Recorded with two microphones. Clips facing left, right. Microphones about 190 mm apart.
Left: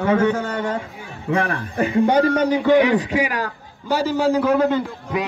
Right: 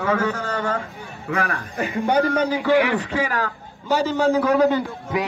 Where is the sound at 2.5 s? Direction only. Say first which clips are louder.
Left 5 dB; 20° left (ahead or behind); by 5.2 s centre (ahead or behind).